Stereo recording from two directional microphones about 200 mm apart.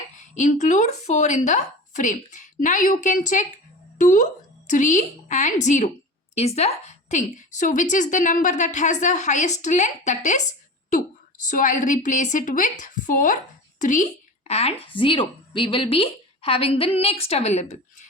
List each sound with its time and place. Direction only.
0.2 s a woman's voice: 40° left (ahead or behind)
11.4 s a woman's voice: 40° left (ahead or behind)